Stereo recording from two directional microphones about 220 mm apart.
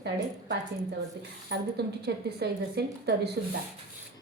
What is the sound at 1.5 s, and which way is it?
A woman's voice, 50° right (ahead or behind).